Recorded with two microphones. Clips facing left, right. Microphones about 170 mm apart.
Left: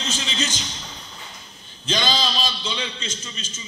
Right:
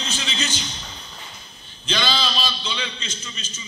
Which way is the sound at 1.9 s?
40° left (ahead or behind).